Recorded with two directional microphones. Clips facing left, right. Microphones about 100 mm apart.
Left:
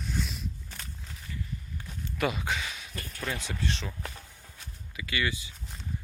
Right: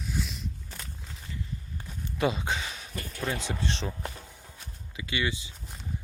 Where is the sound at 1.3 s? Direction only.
25° right (ahead or behind).